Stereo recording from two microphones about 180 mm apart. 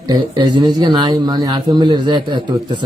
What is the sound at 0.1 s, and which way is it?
A man's voice, 25° right (ahead or behind).